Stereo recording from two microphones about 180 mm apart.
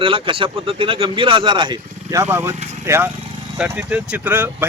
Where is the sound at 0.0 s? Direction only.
30° right (ahead or behind).